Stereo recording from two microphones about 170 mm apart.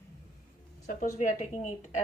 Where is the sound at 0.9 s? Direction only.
50° left (ahead or behind).